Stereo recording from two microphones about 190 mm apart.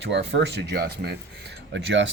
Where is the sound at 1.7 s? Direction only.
70° right (ahead or behind).